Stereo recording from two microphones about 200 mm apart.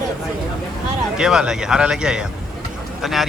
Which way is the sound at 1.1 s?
5° right (ahead or behind).